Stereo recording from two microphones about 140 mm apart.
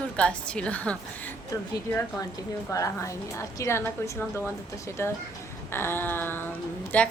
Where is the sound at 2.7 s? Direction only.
20° left (ahead or behind).